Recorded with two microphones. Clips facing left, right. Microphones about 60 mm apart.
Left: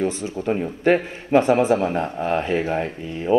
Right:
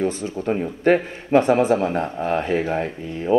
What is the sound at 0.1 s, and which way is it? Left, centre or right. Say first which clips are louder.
A man's voice: even; right.